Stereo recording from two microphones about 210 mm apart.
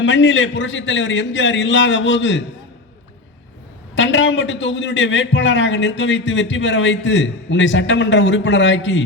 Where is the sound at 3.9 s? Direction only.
60° left (ahead or behind).